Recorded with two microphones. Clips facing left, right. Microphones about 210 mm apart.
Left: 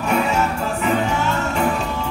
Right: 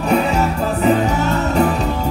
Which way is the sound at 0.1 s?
35° right (ahead or behind).